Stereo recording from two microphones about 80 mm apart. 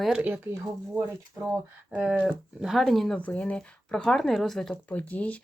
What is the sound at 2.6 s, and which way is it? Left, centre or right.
Speech, centre.